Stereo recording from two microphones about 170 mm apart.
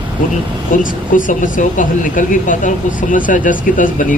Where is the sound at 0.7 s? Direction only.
50° left (ahead or behind).